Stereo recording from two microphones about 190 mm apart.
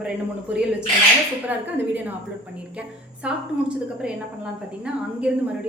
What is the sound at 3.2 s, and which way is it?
A woman's voice, 5° right (ahead or behind).